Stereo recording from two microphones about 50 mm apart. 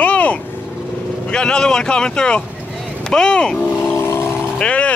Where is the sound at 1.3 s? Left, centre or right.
Centre.